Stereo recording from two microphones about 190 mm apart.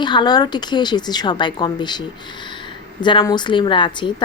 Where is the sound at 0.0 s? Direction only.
25° left (ahead or behind).